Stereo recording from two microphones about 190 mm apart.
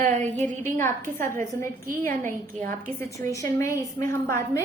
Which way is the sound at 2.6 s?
15° left (ahead or behind).